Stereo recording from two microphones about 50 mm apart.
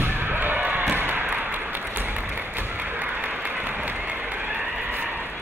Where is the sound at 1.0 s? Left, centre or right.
Right.